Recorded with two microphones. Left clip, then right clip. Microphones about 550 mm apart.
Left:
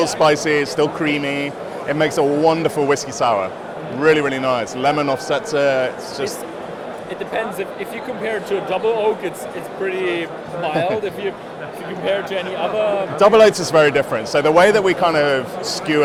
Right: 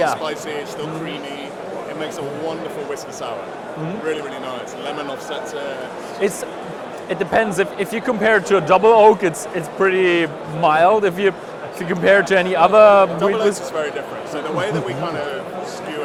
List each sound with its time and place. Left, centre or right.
0.2 s speech: left
7.1 s a man's voice: right
13.1 s speech: left